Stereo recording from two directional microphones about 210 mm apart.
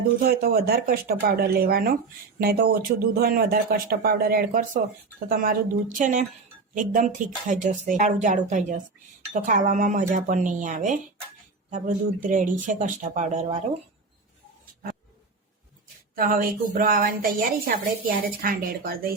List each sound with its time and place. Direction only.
0.2 s a woman's voice: 45° right (ahead or behind)
16.1 s a woman's voice: 45° right (ahead or behind)